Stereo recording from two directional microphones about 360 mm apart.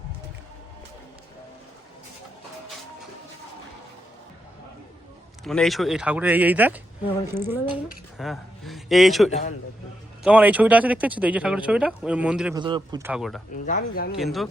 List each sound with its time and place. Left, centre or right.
5.5 s speech: centre
13.7 s speech: left
14.2 s speech: centre